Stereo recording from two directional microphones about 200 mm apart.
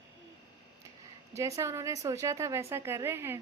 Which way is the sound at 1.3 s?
15° right (ahead or behind).